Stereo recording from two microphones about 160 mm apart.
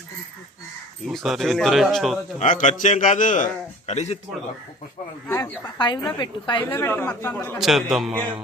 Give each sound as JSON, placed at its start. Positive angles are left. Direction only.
{"t": 1.0, "sound": "speech", "side_deg": 0}
{"t": 2.4, "sound": "a man's voice", "side_deg": 50}
{"t": 5.3, "sound": "a woman's voice", "side_deg": 25}
{"t": 6.7, "sound": "speech", "side_deg": 15}
{"t": 7.6, "sound": "speech", "side_deg": 0}